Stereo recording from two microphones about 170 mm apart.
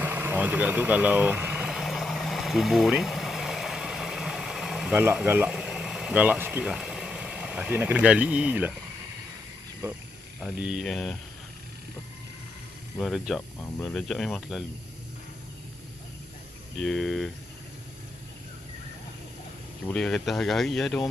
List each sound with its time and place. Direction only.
0.0 s vehicle: 10° right (ahead or behind)
4.9 s speech: 10° right (ahead or behind)
10.4 s speech: 5° right (ahead or behind)
13.0 s speech: centre (ahead or behind)
16.8 s speech: centre (ahead or behind)
19.9 s speech: 5° left (ahead or behind)